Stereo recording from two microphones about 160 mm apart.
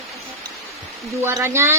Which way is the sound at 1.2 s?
15° right (ahead or behind).